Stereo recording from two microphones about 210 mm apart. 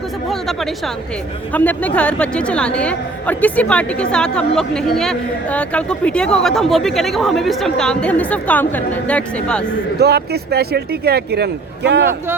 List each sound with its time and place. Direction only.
0.3 s a woman's voice: centre (ahead or behind)
10.0 s speech: 50° right (ahead or behind)